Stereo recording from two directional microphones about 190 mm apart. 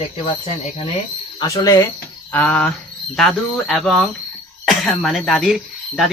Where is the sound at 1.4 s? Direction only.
15° left (ahead or behind).